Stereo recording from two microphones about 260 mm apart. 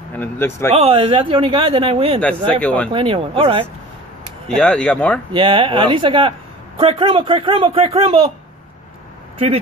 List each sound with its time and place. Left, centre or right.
0.2 s speech: centre
0.7 s a man's voice: right
2.2 s speech: centre
2.9 s a man's voice: centre
4.5 s speech: centre
5.3 s a man's voice: centre